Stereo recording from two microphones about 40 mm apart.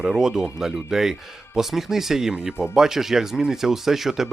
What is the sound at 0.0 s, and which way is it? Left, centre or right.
Speech, centre.